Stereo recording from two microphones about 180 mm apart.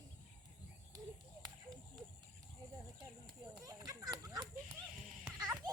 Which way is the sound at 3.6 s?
20° right (ahead or behind).